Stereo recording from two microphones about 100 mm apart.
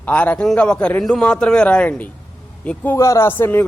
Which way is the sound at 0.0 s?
15° left (ahead or behind).